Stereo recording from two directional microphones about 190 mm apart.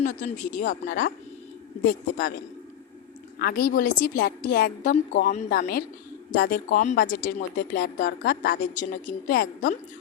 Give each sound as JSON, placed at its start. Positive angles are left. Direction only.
{"t": 0.0, "sound": "speech", "side_deg": 40}
{"t": 3.3, "sound": "speech", "side_deg": 50}
{"t": 5.5, "sound": "speech", "side_deg": 50}